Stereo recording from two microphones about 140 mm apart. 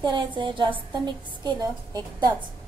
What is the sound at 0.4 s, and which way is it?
A woman's voice, 35° right (ahead or behind).